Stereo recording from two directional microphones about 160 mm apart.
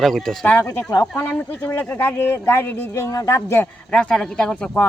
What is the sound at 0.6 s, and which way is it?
Speech, 20° left (ahead or behind).